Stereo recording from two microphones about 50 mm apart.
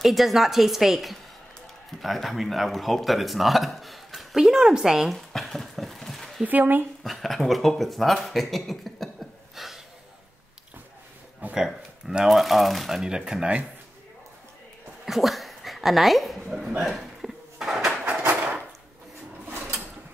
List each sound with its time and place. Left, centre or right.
0.0 s speech: centre
5.1 s a sound: centre
6.4 s speech: right
7.0 s speech: centre
9.6 s snort: centre
11.5 s speech: centre
13.0 s speech: centre
15.0 s speech: centre
16.8 s a sound: centre